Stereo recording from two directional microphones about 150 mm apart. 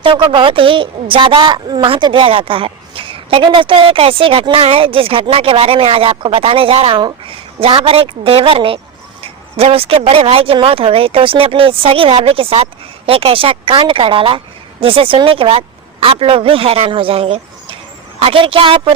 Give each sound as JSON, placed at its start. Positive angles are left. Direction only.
{"t": 0.0, "sound": "speech", "side_deg": -35}